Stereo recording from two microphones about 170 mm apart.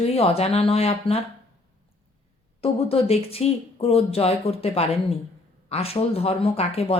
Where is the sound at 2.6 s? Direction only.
35° left (ahead or behind).